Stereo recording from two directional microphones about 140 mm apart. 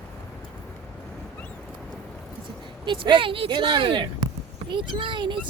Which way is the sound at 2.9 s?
35° right (ahead or behind).